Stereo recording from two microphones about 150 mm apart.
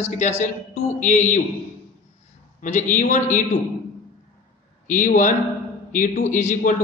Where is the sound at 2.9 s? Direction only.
55° left (ahead or behind).